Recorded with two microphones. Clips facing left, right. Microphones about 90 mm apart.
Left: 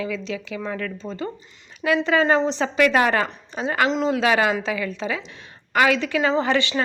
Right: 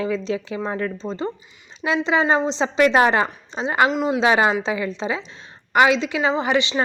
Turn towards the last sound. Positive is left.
turn(degrees=-20)  # may be behind; listen again after turning